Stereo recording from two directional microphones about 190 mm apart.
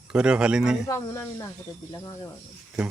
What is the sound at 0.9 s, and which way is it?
Speech, 15° left (ahead or behind).